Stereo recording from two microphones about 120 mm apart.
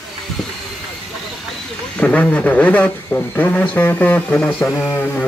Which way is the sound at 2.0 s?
10° left (ahead or behind).